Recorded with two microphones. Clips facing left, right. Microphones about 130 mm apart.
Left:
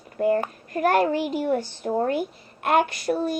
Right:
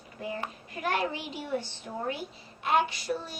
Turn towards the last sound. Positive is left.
turn(degrees=55)  # may be behind; listen again after turning